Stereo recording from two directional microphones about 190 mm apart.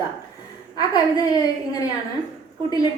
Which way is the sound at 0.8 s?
20° left (ahead or behind).